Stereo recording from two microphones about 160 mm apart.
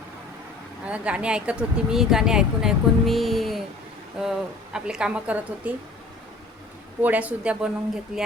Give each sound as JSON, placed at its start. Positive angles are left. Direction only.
{"t": 0.9, "sound": "speech", "side_deg": -5}
{"t": 7.0, "sound": "speech", "side_deg": -10}